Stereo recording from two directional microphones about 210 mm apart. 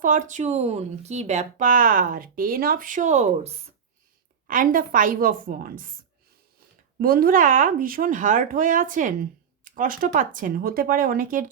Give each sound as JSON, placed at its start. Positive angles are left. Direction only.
{"t": 0.0, "sound": "speech", "side_deg": -35}
{"t": 7.0, "sound": "speech", "side_deg": -45}